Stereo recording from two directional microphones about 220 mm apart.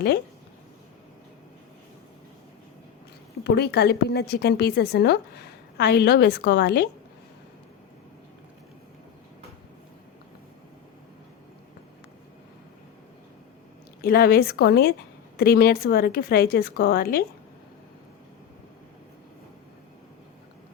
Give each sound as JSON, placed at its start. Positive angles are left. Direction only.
{"t": 3.4, "sound": "a woman's voice", "side_deg": 50}
{"t": 14.0, "sound": "a woman's voice", "side_deg": 45}